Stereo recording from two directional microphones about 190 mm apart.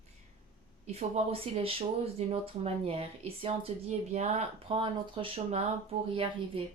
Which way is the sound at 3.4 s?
35° right (ahead or behind).